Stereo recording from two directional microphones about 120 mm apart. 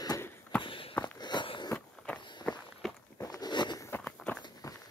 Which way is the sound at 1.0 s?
40° left (ahead or behind).